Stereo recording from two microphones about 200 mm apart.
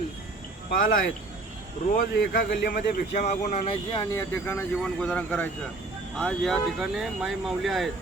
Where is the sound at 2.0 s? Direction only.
45° left (ahead or behind).